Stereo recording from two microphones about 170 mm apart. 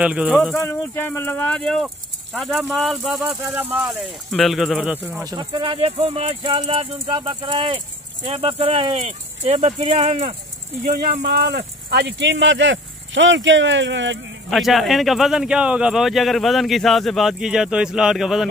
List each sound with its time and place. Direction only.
0.0 s speech: 5° right (ahead or behind)
0.6 s speech: 15° left (ahead or behind); by 5.2 s 5° right (ahead or behind)
5.2 s speech: 25° right (ahead or behind)
11.2 s speech: 80° right
14.5 s speech: centre (ahead or behind)